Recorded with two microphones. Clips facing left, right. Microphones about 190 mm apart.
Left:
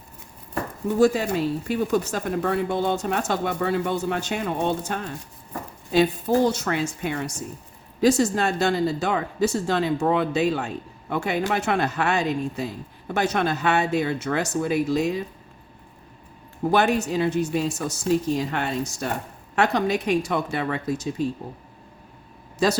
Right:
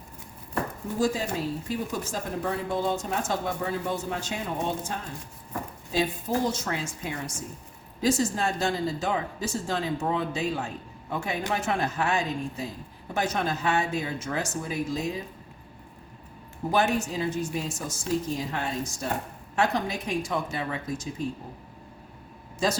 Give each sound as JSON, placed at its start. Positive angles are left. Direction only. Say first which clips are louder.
{"t": 0.9, "sound": "speech", "louder": "left 7 dB", "side_deg": 70}
{"t": 16.7, "sound": "speech", "louder": "left 4 dB", "side_deg": 70}
{"t": 22.6, "sound": "speech", "louder": "left 5 dB", "side_deg": 70}